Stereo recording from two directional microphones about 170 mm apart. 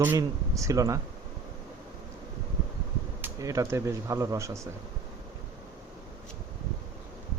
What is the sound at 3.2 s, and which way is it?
Speech, 20° right (ahead or behind).